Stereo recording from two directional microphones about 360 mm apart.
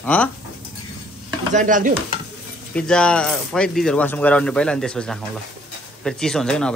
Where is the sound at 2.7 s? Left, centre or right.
Centre.